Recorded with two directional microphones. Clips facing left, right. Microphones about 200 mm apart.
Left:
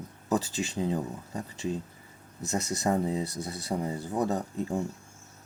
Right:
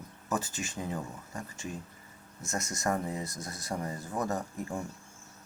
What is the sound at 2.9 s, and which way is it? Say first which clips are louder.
Speech: left 4 dB; 20° left (ahead or behind).